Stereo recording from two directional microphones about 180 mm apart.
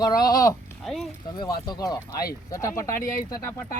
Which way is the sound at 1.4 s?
25° left (ahead or behind).